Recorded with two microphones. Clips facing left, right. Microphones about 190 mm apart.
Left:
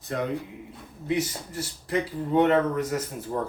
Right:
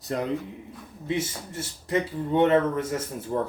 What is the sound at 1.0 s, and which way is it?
Speech, 25° right (ahead or behind).